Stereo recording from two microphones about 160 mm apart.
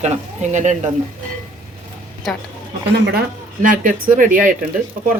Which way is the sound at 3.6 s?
55° right (ahead or behind).